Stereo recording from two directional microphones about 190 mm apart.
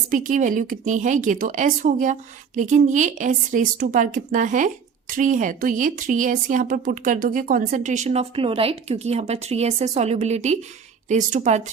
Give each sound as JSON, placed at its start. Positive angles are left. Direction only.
{"t": 0.1, "sound": "speech", "side_deg": -45}